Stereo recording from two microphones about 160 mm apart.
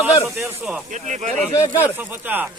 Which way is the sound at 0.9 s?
50° right (ahead or behind).